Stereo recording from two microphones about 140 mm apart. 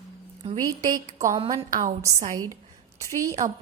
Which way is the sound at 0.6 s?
25° right (ahead or behind).